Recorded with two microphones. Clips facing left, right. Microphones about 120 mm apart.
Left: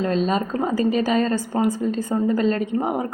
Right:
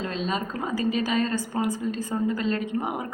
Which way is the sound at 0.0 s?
40° left (ahead or behind).